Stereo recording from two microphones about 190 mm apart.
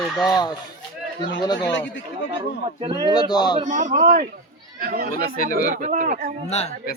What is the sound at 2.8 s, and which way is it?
Speech, 20° right (ahead or behind).